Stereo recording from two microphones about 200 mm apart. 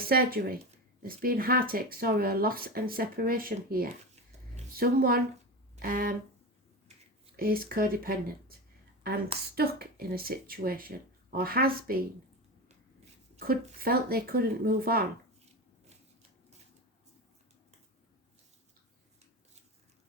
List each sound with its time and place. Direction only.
0.0 s speech: 50° right (ahead or behind)
7.3 s speech: 45° right (ahead or behind)
9.6 s speech: 50° right (ahead or behind)
13.4 s speech: 45° right (ahead or behind)